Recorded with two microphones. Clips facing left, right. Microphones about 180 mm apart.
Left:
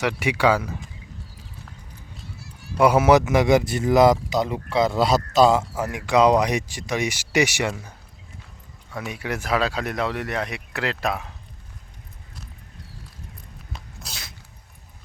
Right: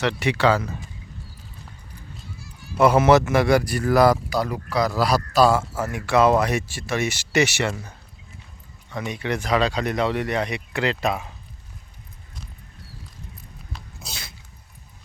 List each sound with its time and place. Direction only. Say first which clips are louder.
0.0 s speech: even; 10° left (ahead or behind)
2.7 s a man's voice: even; 10° left (ahead or behind)
14.0 s a sound: right 1 dB; centre (ahead or behind)